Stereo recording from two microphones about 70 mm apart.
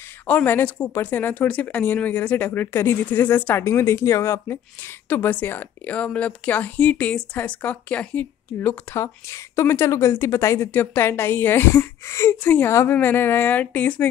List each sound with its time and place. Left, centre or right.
0.3 s speech: left
3.6 s speech: left
5.9 s speech: centre
8.5 s speech: left
12.4 s speech: left